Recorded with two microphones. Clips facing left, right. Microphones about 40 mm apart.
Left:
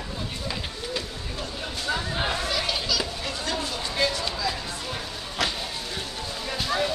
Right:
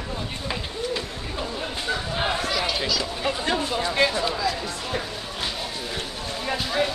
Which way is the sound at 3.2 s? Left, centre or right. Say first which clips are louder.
Right 5 dB; right.